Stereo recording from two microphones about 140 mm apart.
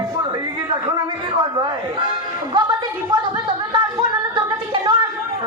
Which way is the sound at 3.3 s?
35° right (ahead or behind).